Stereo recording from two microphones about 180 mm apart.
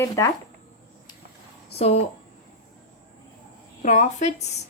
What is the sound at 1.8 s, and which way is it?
Speech, 35° left (ahead or behind).